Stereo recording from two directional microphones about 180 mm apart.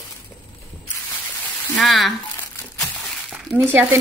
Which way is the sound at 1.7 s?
Centre (ahead or behind).